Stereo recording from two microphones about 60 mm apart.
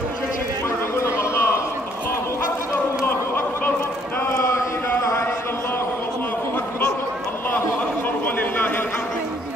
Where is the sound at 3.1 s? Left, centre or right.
Left.